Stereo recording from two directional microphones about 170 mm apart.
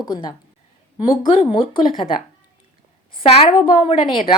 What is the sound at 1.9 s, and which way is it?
A woman's voice, 30° left (ahead or behind).